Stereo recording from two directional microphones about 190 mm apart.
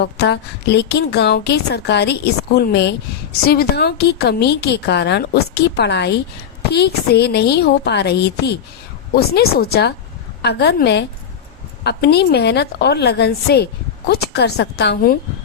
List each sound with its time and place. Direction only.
0.0 s a woman's voice: 60° left (ahead or behind)